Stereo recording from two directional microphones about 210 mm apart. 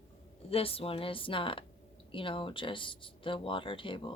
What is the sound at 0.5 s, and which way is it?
Speech, 25° left (ahead or behind).